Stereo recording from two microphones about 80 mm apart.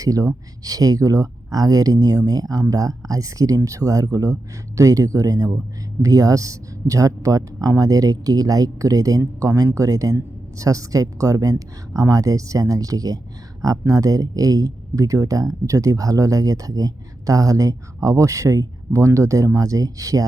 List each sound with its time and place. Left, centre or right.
0.0 s speech: right